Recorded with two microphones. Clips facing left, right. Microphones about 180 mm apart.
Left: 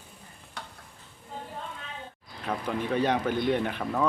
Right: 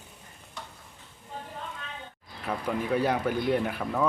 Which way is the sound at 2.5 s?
5° right (ahead or behind).